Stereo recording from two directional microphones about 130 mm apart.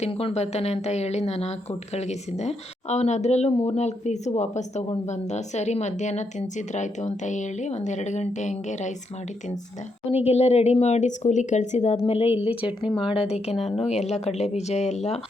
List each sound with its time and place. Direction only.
0.0 s speech: 45° left (ahead or behind); by 8.9 s 65° left (ahead or behind)
10.1 s speech: 55° left (ahead or behind)